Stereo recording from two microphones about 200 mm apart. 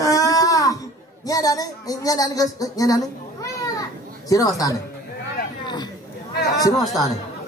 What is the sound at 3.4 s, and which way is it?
Children playing, 15° left (ahead or behind).